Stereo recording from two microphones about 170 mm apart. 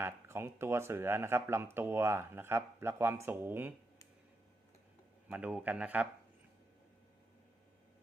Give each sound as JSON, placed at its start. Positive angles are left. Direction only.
{"t": 0.0, "sound": "speech", "side_deg": -15}
{"t": 5.3, "sound": "speech", "side_deg": -10}